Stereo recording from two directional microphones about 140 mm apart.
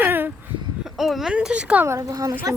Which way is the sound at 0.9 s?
Centre (ahead or behind).